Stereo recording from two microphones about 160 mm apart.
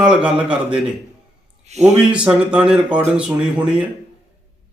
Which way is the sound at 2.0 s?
5° right (ahead or behind).